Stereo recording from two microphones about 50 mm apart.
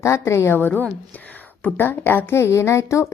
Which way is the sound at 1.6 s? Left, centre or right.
Left.